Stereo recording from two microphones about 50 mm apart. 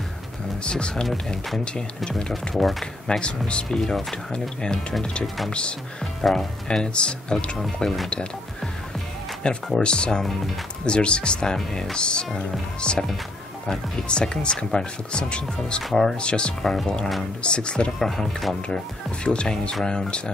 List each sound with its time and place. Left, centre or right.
0.7 s speech: centre
2.5 s speech: centre
3.1 s speech: left
3.8 s speech: centre
9.4 s speech: centre
13.7 s speech: centre
15.8 s speech: centre
16.2 s speech: centre
16.6 s speech: centre
17.4 s speech: centre
17.9 s speech: centre